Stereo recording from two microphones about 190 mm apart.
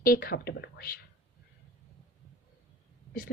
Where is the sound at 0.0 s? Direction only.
50° left (ahead or behind).